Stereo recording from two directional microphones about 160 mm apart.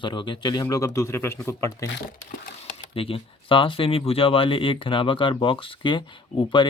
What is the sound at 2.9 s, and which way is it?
Speech, 35° left (ahead or behind).